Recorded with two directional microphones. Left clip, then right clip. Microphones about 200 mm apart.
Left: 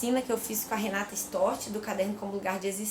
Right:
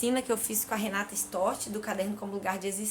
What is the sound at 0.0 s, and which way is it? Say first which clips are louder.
A woman's voice: even; 10° right (ahead or behind).